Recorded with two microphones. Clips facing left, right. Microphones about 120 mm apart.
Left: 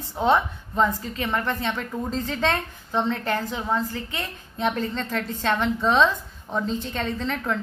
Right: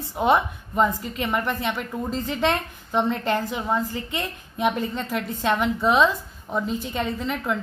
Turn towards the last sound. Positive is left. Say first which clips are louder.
# even
turn(degrees=-5)  # may be behind; listen again after turning